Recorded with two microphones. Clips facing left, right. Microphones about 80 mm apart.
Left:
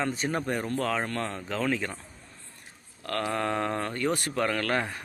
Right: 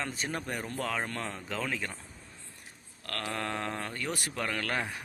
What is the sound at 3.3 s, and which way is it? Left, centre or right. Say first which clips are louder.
A man's voice: left 5 dB; centre.